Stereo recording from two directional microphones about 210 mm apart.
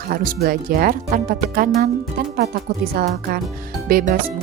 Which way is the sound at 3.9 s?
45° right (ahead or behind).